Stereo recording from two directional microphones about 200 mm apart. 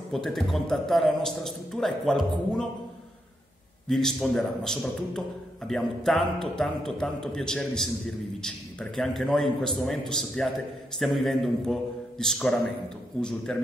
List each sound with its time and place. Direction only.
0.1 s a man's voice: centre (ahead or behind)
3.9 s a man's voice: centre (ahead or behind)